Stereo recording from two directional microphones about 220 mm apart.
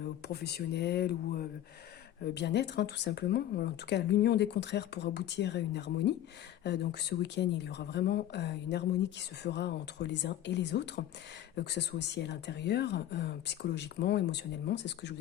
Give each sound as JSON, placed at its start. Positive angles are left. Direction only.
{"t": 0.3, "sound": "speech", "side_deg": 45}
{"t": 7.2, "sound": "speech", "side_deg": 50}